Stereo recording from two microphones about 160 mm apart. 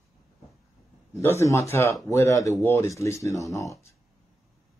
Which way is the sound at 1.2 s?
15° left (ahead or behind).